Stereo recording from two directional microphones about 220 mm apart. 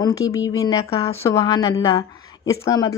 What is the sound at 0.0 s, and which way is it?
Speech, 15° left (ahead or behind).